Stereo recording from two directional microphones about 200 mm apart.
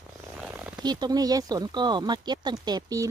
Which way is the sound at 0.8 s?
20° right (ahead or behind).